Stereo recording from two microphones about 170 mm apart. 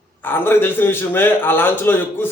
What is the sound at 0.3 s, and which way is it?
A man's voice, 10° left (ahead or behind).